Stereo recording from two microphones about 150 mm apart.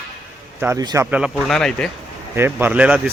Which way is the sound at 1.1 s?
5° right (ahead or behind).